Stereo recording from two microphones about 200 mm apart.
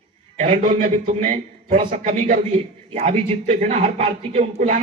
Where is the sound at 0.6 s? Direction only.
40° right (ahead or behind).